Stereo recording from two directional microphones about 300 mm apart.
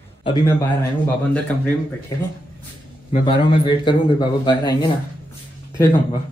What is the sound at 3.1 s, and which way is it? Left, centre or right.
Speech, centre.